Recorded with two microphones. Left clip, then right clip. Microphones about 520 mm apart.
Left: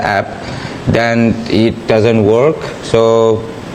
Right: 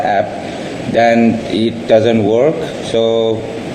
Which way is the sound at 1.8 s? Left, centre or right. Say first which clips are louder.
Right 1 dB; left.